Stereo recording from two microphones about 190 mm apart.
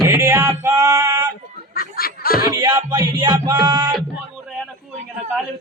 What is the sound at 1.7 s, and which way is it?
Snicker, 50° left (ahead or behind).